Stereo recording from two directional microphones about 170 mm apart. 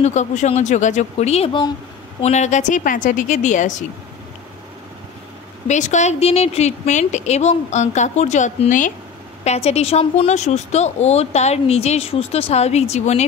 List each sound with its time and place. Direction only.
0.0 s a woman's voice: 45° left (ahead or behind)
2.2 s a woman's voice: 45° left (ahead or behind)
5.7 s a woman's voice: 45° left (ahead or behind)